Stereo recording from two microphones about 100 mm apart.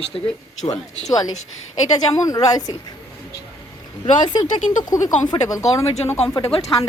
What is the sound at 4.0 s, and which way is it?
Speech, 50° left (ahead or behind).